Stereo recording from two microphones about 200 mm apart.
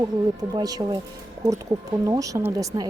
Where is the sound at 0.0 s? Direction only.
20° right (ahead or behind).